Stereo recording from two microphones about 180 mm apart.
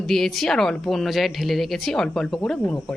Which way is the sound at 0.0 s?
Centre (ahead or behind).